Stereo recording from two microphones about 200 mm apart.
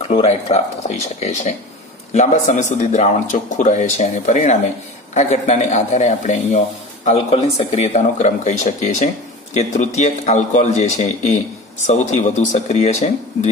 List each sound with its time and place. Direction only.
0.1 s speech: 30° left (ahead or behind)